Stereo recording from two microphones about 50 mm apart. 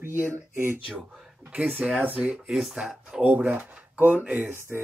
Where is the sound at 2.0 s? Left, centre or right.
Right.